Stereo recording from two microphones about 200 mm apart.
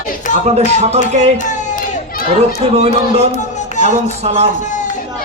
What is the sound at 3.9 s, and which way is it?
Speech, 30° right (ahead or behind).